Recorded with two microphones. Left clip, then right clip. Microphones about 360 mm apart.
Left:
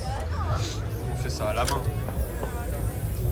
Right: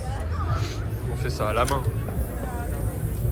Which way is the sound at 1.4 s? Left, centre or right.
Centre.